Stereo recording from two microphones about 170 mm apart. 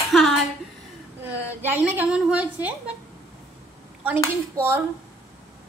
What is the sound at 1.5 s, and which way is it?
A woman's voice, 10° right (ahead or behind).